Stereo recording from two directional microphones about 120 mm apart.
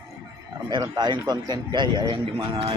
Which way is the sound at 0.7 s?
40° right (ahead or behind).